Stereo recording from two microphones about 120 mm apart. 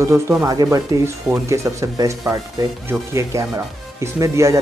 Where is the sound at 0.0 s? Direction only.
20° right (ahead or behind).